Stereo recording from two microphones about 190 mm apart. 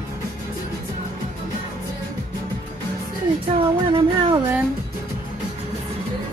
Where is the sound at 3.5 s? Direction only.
30° right (ahead or behind).